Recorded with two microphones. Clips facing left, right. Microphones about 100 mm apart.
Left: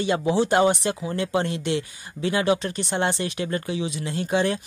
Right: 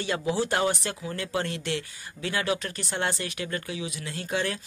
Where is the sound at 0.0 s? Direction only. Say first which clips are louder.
Left 6 dB; 20° left (ahead or behind).